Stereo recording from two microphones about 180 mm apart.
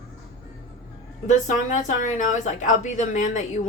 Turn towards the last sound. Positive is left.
turn(degrees=40)  # may be behind; listen again after turning